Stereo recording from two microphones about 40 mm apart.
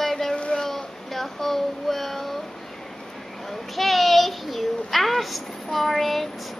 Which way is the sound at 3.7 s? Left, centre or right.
Centre.